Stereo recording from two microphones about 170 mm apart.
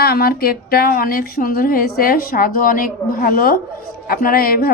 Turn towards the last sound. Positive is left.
turn(degrees=60)  # may be behind; listen again after turning